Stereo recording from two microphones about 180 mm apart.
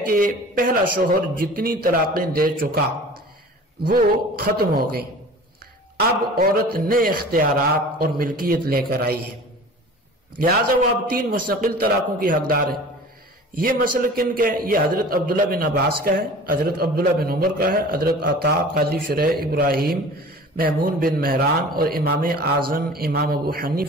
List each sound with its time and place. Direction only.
0.1 s a man's voice: 50° right (ahead or behind)
3.8 s a man's voice: 55° right (ahead or behind)
11.1 s a man's voice: 50° right (ahead or behind)